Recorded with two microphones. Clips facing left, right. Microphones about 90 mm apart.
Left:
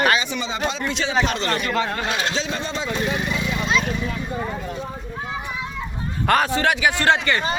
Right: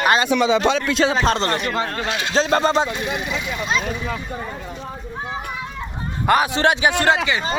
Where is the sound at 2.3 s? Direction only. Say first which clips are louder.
Right 9 dB; 45° right (ahead or behind).